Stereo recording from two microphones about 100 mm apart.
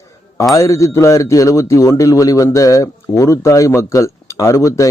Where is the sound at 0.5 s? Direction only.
30° left (ahead or behind).